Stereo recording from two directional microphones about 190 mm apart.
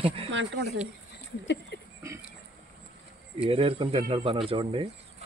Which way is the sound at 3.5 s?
30° right (ahead or behind).